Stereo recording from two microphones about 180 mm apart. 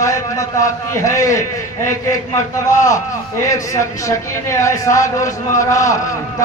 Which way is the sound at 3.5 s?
15° left (ahead or behind).